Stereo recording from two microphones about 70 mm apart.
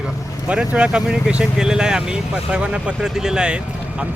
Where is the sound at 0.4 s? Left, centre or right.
Centre.